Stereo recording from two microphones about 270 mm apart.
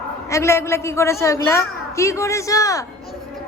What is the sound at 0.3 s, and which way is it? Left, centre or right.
A woman's voice, centre.